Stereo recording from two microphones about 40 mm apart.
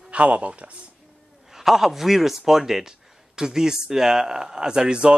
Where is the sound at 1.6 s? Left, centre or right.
Centre.